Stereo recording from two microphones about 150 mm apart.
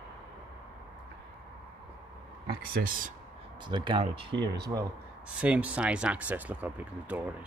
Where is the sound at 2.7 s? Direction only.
70° right (ahead or behind).